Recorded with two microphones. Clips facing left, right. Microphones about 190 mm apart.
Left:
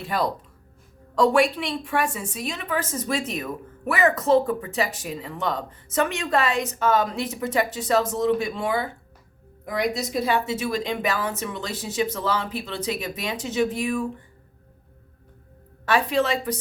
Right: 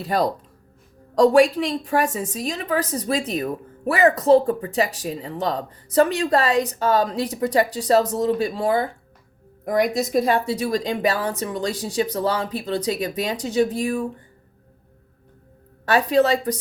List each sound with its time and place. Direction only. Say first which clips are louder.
0.0 s a woman's voice: right 4 dB; 40° right (ahead or behind)
15.9 s a woman's voice: right 4 dB; 35° right (ahead or behind)